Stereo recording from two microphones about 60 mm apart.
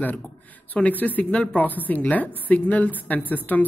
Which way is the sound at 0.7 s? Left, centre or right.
Left.